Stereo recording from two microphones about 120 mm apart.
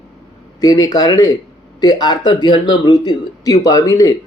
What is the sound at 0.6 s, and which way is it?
Speech, 30° left (ahead or behind).